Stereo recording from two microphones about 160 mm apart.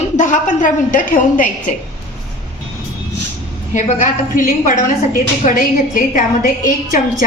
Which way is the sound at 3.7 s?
50° left (ahead or behind).